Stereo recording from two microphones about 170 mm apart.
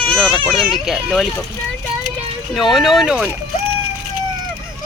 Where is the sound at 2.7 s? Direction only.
Centre (ahead or behind).